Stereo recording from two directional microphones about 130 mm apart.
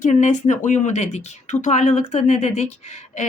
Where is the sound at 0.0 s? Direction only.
65° left (ahead or behind).